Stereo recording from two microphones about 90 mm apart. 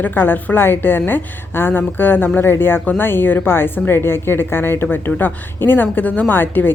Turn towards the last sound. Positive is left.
turn(degrees=20)  # may be behind; listen again after turning